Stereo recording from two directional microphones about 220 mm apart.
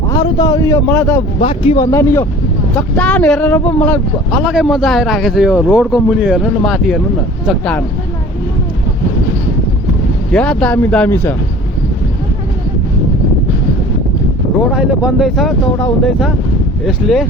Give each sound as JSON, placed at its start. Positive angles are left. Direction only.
{"t": 0.1, "sound": "speech", "side_deg": 15}
{"t": 1.4, "sound": "speech", "side_deg": 25}
{"t": 10.3, "sound": "speech", "side_deg": 5}
{"t": 14.7, "sound": "speech", "side_deg": -5}